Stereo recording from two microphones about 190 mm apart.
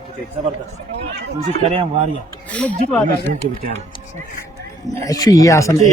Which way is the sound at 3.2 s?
45° right (ahead or behind).